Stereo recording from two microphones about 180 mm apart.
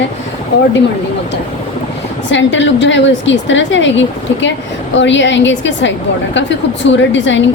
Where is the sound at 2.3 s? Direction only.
90° left.